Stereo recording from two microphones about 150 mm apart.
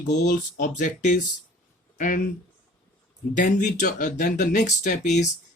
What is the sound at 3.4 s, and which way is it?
Speech, 55° left (ahead or behind).